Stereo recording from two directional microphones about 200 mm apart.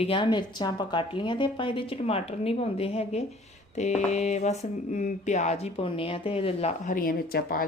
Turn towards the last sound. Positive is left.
turn(degrees=50)  # may be behind; listen again after turning